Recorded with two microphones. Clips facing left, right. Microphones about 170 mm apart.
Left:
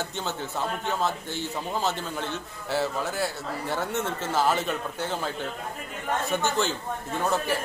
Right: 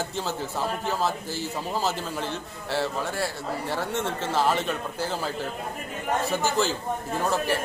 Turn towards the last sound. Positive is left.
turn(degrees=0)  # may be behind; listen again after turning